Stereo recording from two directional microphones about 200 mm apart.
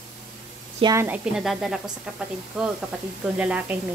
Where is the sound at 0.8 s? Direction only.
20° right (ahead or behind).